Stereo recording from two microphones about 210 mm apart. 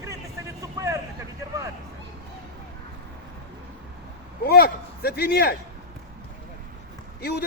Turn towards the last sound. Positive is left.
turn(degrees=50)  # may be behind; listen again after turning